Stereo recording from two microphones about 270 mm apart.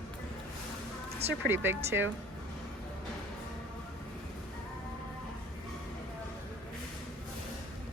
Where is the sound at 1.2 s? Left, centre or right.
Right.